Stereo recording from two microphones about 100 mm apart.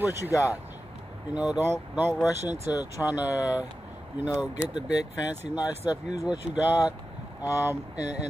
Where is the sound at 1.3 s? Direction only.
15° right (ahead or behind).